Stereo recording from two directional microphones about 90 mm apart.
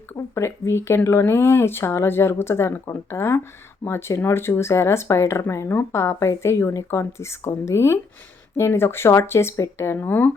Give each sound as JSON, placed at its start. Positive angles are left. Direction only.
{"t": 0.2, "sound": "speech", "side_deg": 35}